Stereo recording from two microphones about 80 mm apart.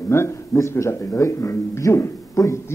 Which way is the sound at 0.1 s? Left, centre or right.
Left.